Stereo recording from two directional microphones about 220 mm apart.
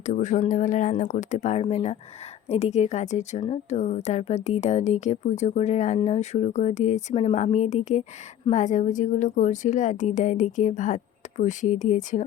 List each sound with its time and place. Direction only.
0.0 s a woman's voice: 35° left (ahead or behind)